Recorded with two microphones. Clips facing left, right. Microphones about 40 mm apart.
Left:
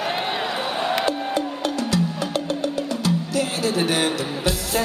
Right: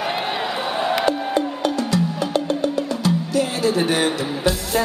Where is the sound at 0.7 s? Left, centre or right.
Centre.